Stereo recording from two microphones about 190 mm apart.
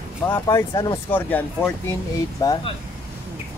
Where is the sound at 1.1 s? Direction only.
10° left (ahead or behind).